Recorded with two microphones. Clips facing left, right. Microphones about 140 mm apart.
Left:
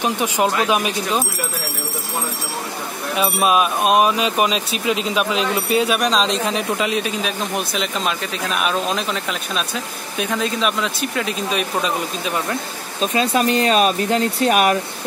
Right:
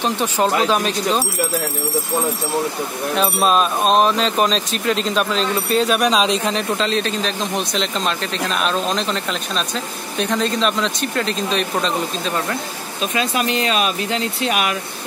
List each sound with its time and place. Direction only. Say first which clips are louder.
0.0 s speech: even; 10° left (ahead or behind)
3.2 s speech: even; 10° left (ahead or behind)
5.9 s speech: right 2 dB; centre (ahead or behind)
13.0 s speech: left 3 dB; 35° left (ahead or behind)